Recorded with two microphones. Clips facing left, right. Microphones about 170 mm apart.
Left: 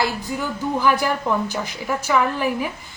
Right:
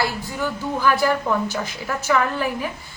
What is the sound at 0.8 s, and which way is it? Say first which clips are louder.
A woman's voice: right 1 dB; 15° left (ahead or behind).